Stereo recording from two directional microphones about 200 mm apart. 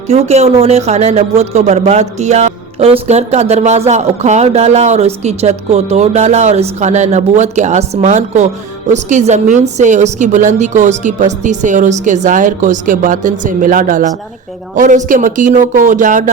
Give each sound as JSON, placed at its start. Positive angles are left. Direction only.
{"t": 0.1, "sound": "speech", "side_deg": -35}